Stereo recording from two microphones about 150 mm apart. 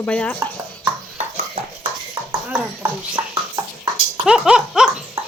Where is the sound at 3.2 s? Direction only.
25° right (ahead or behind).